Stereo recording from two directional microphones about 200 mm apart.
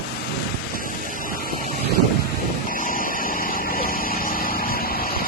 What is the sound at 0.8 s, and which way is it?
Vehicle, 45° left (ahead or behind).